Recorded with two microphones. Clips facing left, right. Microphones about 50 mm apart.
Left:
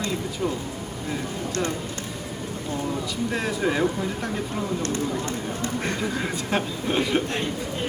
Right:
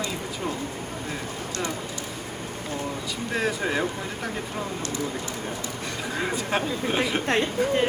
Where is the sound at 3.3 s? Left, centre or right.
Centre.